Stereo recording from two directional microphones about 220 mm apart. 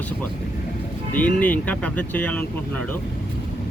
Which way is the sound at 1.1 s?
5° left (ahead or behind).